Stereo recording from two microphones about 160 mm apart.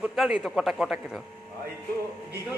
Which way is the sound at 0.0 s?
5° right (ahead or behind).